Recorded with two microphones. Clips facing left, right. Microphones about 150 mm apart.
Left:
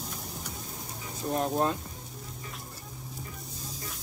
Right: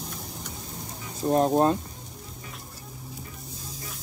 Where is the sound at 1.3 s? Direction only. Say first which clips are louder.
Right 7 dB; 35° right (ahead or behind).